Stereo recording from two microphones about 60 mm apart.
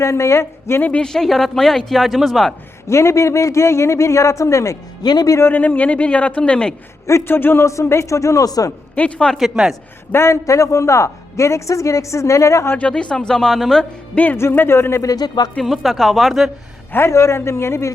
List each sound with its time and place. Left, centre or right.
0.0 s a man's voice: left
0.8 s speech: left
1.0 s speech: centre
2.9 s a man's voice: left
5.4 s speech: left; by 6.7 s centre
7.3 s a man's voice: left
7.6 s a woman's voice: left
9.0 s speech: centre
9.6 s a man's voice: centre
10.1 s a woman's voice: left
12.9 s speech: centre
14.3 s a man's voice: left
15.6 s speech: centre
16.9 s a man's voice: left